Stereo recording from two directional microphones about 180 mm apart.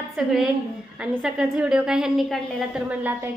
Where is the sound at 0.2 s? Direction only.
Centre (ahead or behind).